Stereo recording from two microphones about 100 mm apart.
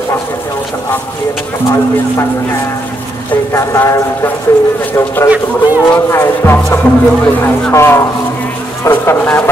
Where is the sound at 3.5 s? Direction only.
30° left (ahead or behind).